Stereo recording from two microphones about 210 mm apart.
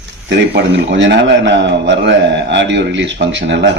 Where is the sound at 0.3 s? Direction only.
55° right (ahead or behind).